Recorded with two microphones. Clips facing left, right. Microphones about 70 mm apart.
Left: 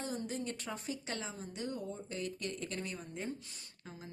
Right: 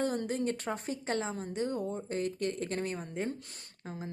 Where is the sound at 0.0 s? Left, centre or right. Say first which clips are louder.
Right 8 dB; right.